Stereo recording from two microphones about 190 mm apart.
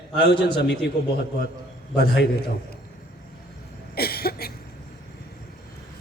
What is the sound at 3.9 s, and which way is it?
Cough, 55° left (ahead or behind).